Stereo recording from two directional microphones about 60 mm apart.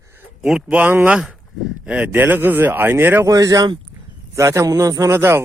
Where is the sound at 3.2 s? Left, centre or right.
Right.